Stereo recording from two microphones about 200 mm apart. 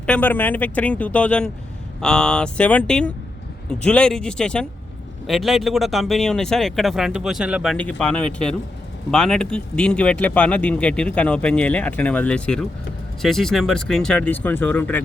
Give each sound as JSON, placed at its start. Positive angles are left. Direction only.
{"t": 0.0, "sound": "speech", "side_deg": 5}